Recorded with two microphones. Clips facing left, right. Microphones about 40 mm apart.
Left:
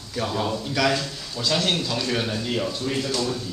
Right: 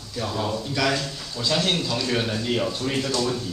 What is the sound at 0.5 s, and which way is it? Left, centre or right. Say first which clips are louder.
A man's voice: left 1 dB; centre.